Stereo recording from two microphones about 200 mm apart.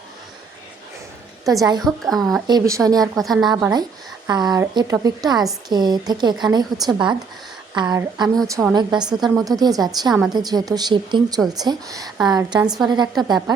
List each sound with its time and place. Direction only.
1.5 s speech: 20° right (ahead or behind)
1.8 s a woman's voice: centre (ahead or behind)
2.5 s speech: 15° right (ahead or behind)
3.0 s a woman's voice: centre (ahead or behind)
3.4 s speech: 20° right (ahead or behind)